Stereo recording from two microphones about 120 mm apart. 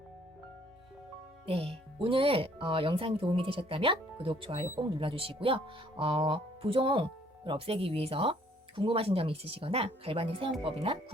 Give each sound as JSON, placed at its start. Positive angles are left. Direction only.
{"t": 1.5, "sound": "speech", "side_deg": -50}